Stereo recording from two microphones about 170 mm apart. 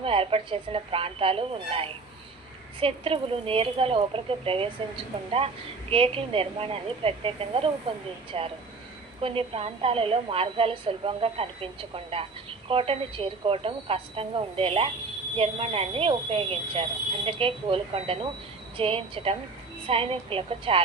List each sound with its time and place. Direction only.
0.0 s a woman's voice: 35° right (ahead or behind)
2.8 s a woman's voice: 35° right (ahead or behind)
5.9 s a woman's voice: 35° right (ahead or behind)